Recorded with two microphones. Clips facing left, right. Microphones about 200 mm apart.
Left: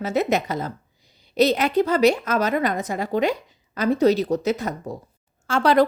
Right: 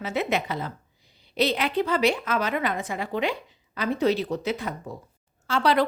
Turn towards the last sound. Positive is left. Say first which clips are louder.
# left 4 dB
turn(degrees=45)  # may be behind; listen again after turning